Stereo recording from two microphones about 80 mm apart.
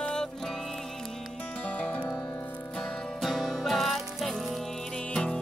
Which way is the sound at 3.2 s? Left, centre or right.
Centre.